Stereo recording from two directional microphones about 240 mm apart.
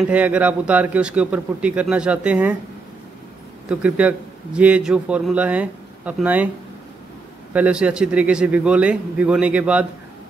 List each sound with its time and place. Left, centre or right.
0.1 s a man's voice: centre
3.6 s a man's voice: centre
7.5 s a man's voice: centre